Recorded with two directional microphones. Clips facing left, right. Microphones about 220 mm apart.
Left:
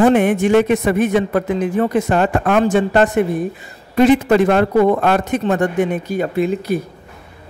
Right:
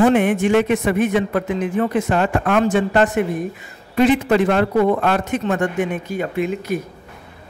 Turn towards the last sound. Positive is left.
turn(degrees=35)  # may be behind; listen again after turning